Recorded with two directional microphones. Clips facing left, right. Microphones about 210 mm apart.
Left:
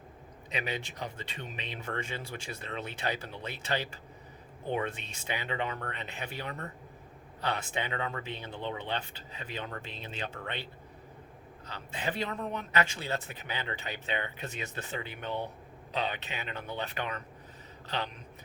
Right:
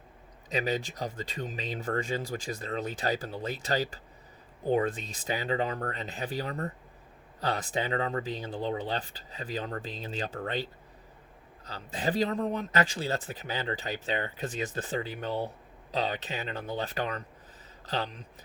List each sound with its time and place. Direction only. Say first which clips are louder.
0.5 s speech: right 6 dB; 40° right (ahead or behind)